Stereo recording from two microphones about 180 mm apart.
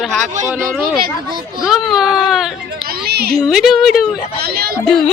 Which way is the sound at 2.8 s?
60° right (ahead or behind).